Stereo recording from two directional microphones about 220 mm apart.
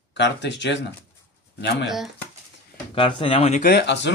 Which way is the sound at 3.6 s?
50° left (ahead or behind).